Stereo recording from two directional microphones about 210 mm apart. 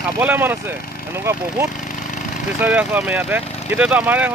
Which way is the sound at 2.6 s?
5° right (ahead or behind).